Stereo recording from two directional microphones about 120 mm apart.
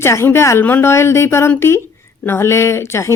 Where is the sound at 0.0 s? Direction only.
20° left (ahead or behind).